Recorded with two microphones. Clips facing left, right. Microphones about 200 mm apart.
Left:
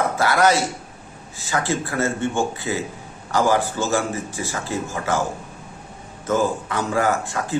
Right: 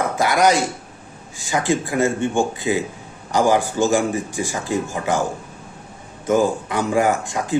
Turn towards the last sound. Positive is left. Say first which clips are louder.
# right 2 dB
turn(degrees=-15)  # may be behind; listen again after turning